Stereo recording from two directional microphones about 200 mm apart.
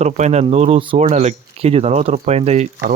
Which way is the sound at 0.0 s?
35° right (ahead or behind).